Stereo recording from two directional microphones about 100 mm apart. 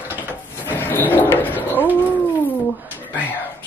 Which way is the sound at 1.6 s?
20° left (ahead or behind).